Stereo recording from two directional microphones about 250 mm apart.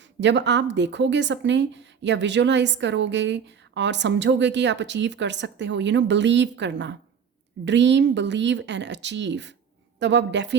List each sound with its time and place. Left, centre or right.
0.0 s a woman's voice: right